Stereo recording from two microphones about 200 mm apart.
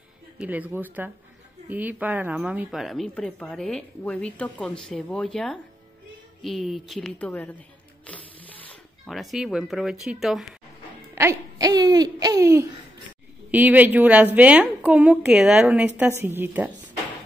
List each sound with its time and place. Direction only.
0.4 s a woman's voice: 5° right (ahead or behind)
8.1 s a sound: 5° left (ahead or behind)
9.0 s a woman's voice: centre (ahead or behind)
11.1 s a woman's voice: 15° right (ahead or behind)